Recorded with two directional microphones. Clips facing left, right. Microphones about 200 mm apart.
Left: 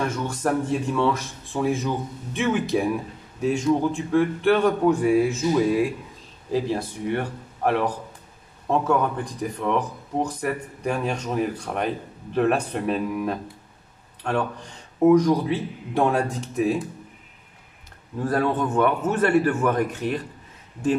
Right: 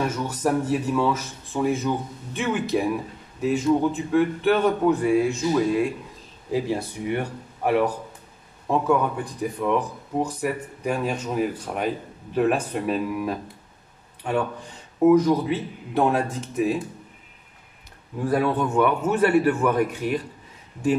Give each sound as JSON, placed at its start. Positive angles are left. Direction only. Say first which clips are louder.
{"t": 0.0, "sound": "speech", "louder": "right 1 dB", "side_deg": -5}
{"t": 6.5, "sound": "a man's voice", "louder": "even", "side_deg": -10}
{"t": 18.2, "sound": "a man's voice", "louder": "right 1 dB", "side_deg": -10}